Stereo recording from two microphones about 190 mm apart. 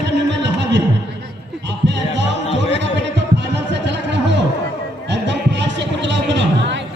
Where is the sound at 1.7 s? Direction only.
65° right (ahead or behind).